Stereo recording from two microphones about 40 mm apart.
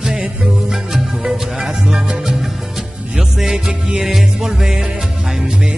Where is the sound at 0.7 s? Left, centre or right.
Centre.